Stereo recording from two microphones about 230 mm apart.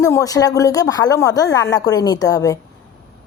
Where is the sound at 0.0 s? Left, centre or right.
Centre.